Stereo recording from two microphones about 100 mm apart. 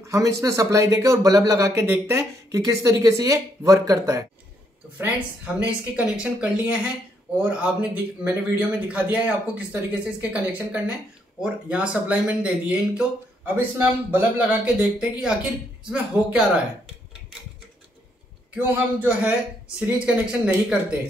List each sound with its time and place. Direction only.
0.0 s speech: 30° right (ahead or behind)
4.9 s speech: 15° right (ahead or behind)
18.5 s a man's voice: 20° right (ahead or behind)